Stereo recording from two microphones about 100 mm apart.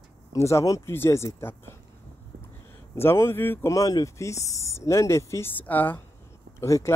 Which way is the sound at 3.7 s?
35° left (ahead or behind).